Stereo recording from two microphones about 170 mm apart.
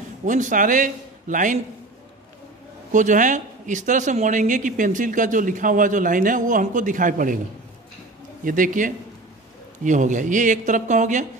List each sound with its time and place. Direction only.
0.2 s a man's voice: 50° right (ahead or behind)
2.9 s speech: 50° right (ahead or behind)
8.5 s speech: 50° right (ahead or behind)